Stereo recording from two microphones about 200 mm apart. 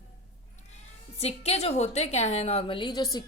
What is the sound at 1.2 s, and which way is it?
A woman's voice, 30° left (ahead or behind).